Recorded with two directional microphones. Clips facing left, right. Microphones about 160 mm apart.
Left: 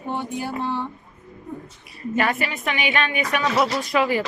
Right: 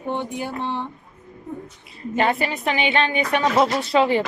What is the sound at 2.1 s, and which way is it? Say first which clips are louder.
A woman's voice: right 2 dB; 25° right (ahead or behind).